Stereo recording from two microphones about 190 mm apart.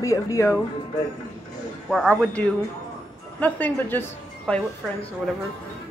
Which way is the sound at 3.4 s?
10° left (ahead or behind).